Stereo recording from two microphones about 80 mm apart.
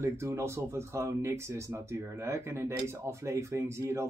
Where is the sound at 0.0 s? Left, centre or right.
Right.